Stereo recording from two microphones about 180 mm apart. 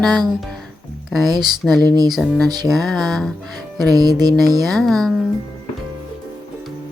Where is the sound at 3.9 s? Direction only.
20° right (ahead or behind).